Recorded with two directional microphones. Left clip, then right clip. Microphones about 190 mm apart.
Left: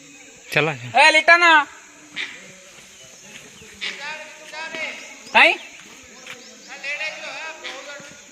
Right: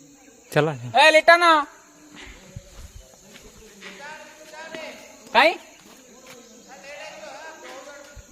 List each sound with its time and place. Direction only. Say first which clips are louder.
0.5 s a man's voice: left 2 dB; 25° right (ahead or behind)
5.3 s speech: left 3 dB; 40° right (ahead or behind)